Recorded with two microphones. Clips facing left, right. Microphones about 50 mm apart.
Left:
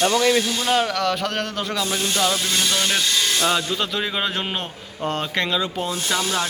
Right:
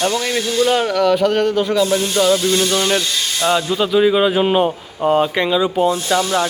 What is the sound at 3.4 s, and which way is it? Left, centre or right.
Speech, centre.